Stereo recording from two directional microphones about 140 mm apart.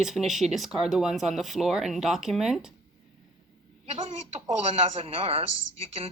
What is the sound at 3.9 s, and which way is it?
Speech, 40° right (ahead or behind).